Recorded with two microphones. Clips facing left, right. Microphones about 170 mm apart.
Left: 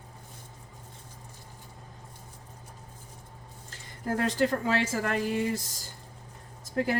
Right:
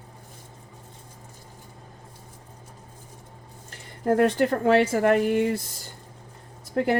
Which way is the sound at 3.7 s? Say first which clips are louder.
Right 9 dB; 65° right (ahead or behind).